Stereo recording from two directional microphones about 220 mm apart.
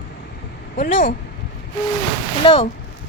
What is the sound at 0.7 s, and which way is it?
Speech, 35° left (ahead or behind).